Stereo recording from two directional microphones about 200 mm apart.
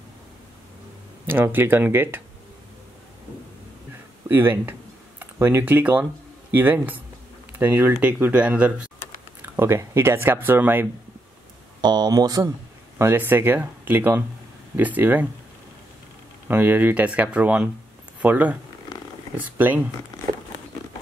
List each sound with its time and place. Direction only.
1.2 s speech: 10° right (ahead or behind)
4.3 s speech: 10° right (ahead or behind)
16.4 s speech: 10° right (ahead or behind)